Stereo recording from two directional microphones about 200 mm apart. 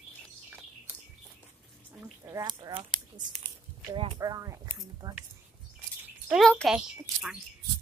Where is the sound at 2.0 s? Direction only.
15° right (ahead or behind).